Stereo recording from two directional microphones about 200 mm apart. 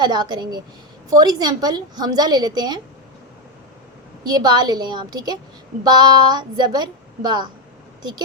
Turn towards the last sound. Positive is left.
turn(degrees=-20)  # may be behind; listen again after turning